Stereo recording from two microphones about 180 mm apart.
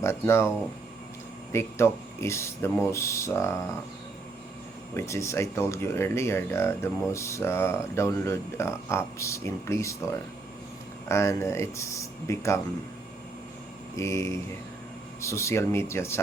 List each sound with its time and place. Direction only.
0.0 s speech: 15° left (ahead or behind)
1.5 s speech: 15° left (ahead or behind)
4.9 s speech: 15° left (ahead or behind)
14.0 s speech: 15° left (ahead or behind)